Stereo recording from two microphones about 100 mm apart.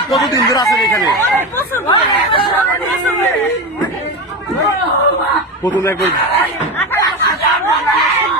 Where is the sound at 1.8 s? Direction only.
55° left (ahead or behind).